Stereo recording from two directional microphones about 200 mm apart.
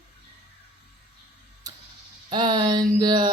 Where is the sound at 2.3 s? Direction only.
20° right (ahead or behind).